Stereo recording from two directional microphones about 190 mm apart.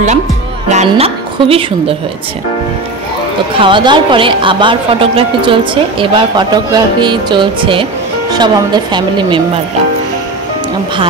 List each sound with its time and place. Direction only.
0.7 s speech: 35° right (ahead or behind)
3.5 s a woman's voice: 25° right (ahead or behind)